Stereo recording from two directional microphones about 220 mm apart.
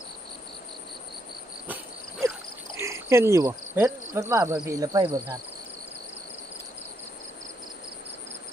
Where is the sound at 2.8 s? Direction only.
10° right (ahead or behind).